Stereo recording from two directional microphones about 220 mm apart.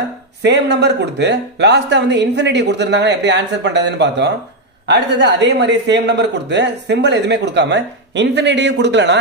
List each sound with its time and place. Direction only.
0.4 s a man's voice: 50° right (ahead or behind)